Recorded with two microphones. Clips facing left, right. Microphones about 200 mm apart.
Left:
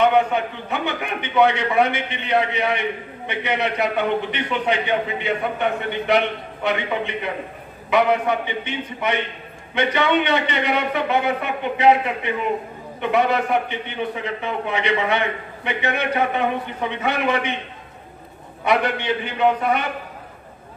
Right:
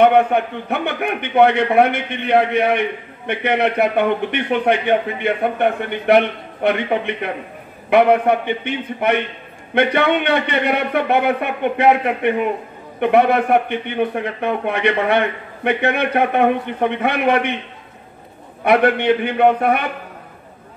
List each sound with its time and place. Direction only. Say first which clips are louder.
0.0 s a man's voice: right 4 dB; 60° right (ahead or behind)
18.6 s a man's voice: right 6 dB; 55° right (ahead or behind)